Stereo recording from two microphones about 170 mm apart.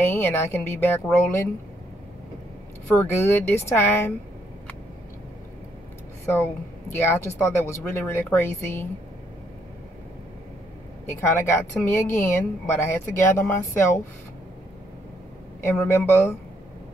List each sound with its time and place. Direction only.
0.0 s a woman's voice: 15° left (ahead or behind)
3.0 s a woman's voice: 15° left (ahead or behind)
6.3 s a woman's voice: 15° left (ahead or behind)
11.1 s a woman's voice: 15° left (ahead or behind)
15.6 s a woman's voice: 15° left (ahead or behind)